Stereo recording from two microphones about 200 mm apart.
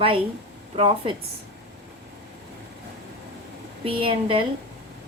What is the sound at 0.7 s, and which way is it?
Speech, 30° right (ahead or behind).